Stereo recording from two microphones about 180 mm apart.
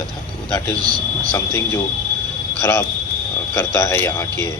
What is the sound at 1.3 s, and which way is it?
Speech, 15° left (ahead or behind).